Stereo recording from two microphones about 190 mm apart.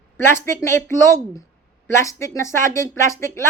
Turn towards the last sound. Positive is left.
turn(degrees=15)  # may be behind; listen again after turning